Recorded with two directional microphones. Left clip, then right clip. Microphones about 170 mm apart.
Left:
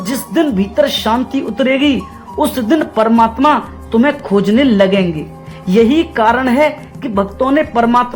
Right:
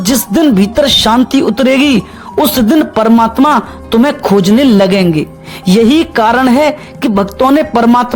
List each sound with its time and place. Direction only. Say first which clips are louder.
0.0 s speech: right 5 dB; 45° right (ahead or behind)
2.4 s music: right 4 dB; 45° right (ahead or behind)